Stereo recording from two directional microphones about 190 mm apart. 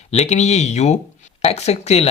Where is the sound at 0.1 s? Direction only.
35° left (ahead or behind).